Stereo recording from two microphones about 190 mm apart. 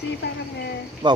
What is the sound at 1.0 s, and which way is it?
Speech, 25° right (ahead or behind).